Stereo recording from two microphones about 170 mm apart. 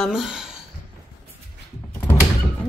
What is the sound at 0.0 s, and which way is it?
Speech, centre (ahead or behind).